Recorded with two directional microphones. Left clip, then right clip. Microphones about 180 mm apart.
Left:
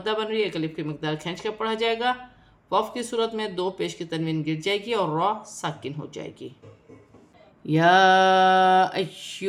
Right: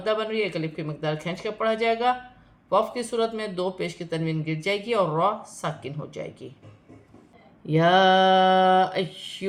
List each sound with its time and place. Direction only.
0.0 s speech: 15° left (ahead or behind)
7.7 s speech: 25° left (ahead or behind)